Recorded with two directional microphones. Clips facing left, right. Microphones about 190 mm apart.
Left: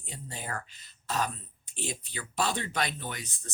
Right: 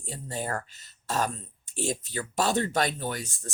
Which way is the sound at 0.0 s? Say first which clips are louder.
Right 7 dB; 45° right (ahead or behind).